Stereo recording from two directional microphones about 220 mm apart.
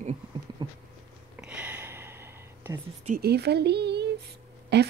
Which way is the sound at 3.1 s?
45° right (ahead or behind).